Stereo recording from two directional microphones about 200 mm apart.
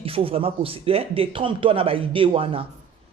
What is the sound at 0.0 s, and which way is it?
Speech, 30° right (ahead or behind).